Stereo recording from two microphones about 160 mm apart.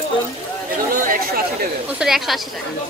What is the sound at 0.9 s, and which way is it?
Chatter, 60° right (ahead or behind).